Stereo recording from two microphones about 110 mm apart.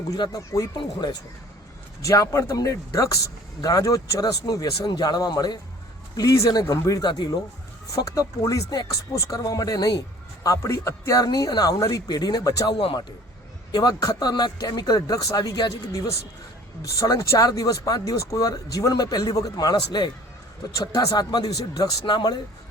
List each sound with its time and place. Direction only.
0.1 s speech: 35° left (ahead or behind)
2.0 s speech: 30° left (ahead or behind)
9.1 s speech: 30° left (ahead or behind)
12.7 s a man's voice: 50° left (ahead or behind)
13.7 s speech: 40° left (ahead or behind)
15.9 s speech: 30° left (ahead or behind)